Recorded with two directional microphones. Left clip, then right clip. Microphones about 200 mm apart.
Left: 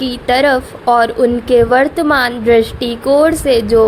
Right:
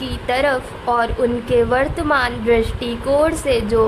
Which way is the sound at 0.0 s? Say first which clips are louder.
Left 6 dB; 30° left (ahead or behind).